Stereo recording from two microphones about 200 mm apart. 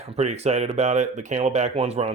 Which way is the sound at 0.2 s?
30° right (ahead or behind).